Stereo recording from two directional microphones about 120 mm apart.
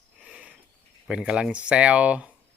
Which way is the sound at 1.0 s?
5° right (ahead or behind).